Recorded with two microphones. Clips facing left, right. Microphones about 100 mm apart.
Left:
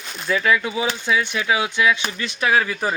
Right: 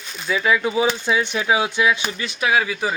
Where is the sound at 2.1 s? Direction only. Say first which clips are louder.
Even; 10° right (ahead or behind).